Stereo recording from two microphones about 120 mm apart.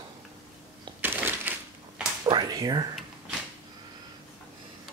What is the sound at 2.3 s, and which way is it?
Speech, 35° right (ahead or behind).